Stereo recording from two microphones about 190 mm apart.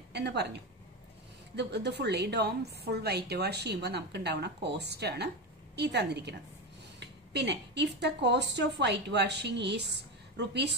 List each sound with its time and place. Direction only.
0.1 s a woman's voice: 60° right (ahead or behind)